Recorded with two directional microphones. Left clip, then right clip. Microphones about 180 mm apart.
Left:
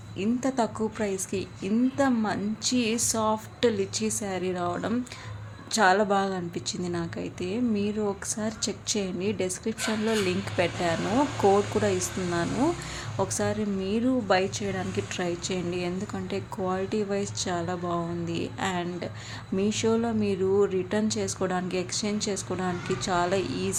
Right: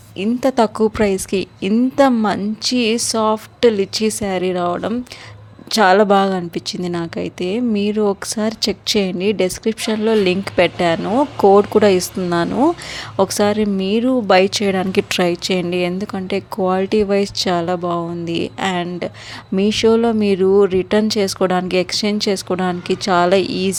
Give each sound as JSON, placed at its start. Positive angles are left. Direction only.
{"t": 0.2, "sound": "speech", "side_deg": -50}